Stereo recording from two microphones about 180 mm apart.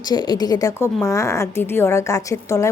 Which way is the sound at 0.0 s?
25° left (ahead or behind).